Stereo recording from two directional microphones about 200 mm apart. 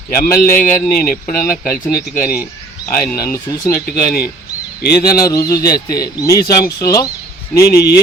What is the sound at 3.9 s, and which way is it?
Speech, 50° left (ahead or behind).